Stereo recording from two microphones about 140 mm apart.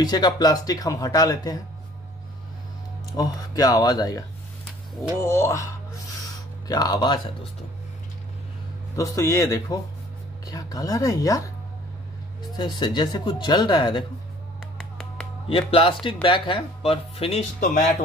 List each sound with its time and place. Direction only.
0.0 s speech: 30° left (ahead or behind)
3.2 s speech: 25° left (ahead or behind)
5.2 s speech: 20° left (ahead or behind)
6.7 s speech: 30° left (ahead or behind)
8.9 s speech: 25° left (ahead or behind)
12.5 s speech: 30° left (ahead or behind)
15.4 s speech: 40° left (ahead or behind)